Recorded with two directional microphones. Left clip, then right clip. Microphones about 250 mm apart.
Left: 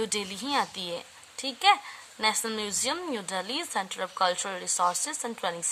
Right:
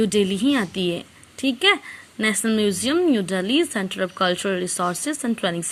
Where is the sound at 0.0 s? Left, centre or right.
Centre.